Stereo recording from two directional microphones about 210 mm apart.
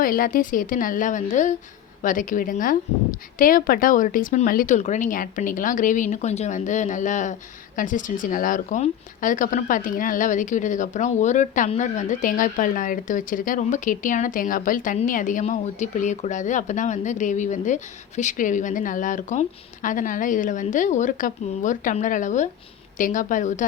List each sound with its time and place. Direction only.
0.0 s speech: 40° left (ahead or behind)